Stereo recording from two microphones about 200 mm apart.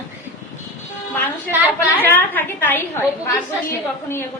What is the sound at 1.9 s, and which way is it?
A woman's voice, 10° left (ahead or behind).